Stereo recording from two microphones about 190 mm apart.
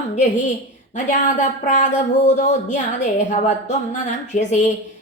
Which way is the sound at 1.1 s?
40° left (ahead or behind).